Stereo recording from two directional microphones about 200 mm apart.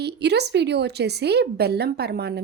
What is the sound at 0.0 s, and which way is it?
A woman's voice, 55° right (ahead or behind).